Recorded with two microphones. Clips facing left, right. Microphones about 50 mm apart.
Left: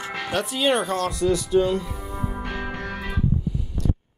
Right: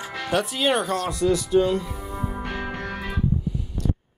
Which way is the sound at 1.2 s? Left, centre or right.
Right.